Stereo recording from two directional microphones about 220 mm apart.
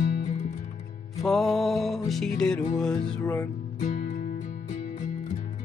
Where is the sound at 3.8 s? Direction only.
40° left (ahead or behind).